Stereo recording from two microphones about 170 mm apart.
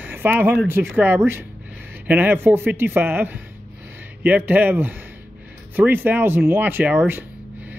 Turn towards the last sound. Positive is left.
turn(degrees=-10)  # may be behind; listen again after turning